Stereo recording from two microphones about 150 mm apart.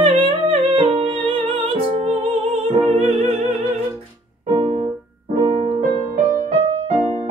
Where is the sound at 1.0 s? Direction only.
35° right (ahead or behind).